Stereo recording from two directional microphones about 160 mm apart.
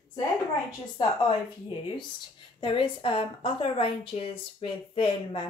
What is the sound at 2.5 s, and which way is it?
A woman's voice, 30° left (ahead or behind).